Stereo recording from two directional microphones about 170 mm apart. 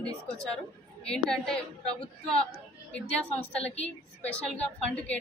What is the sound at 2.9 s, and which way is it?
A woman's voice, 5° left (ahead or behind).